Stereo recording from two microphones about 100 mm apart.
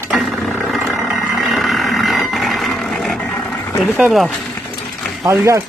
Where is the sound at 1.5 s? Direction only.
Centre (ahead or behind).